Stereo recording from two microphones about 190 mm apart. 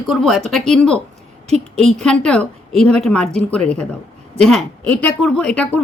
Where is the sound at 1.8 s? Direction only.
5° left (ahead or behind).